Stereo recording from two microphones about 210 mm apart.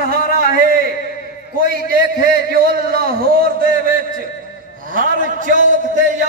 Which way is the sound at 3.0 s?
45° right (ahead or behind).